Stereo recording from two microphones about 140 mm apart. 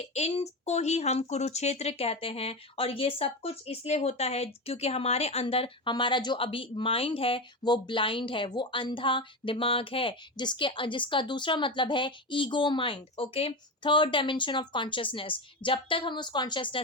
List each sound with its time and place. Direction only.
0.0 s a woman's voice: 50° left (ahead or behind); by 16.8 s 35° left (ahead or behind)